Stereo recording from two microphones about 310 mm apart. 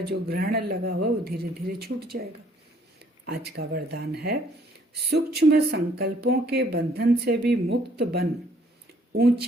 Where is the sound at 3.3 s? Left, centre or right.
Right.